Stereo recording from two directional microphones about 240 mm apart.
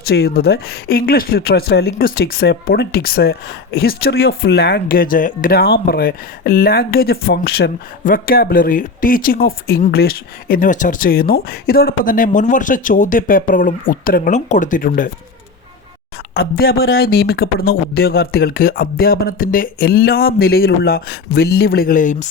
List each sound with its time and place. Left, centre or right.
0.0 s speech: left
16.3 s speech: left